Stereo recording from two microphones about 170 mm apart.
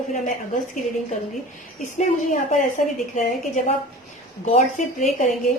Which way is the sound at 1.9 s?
45° left (ahead or behind).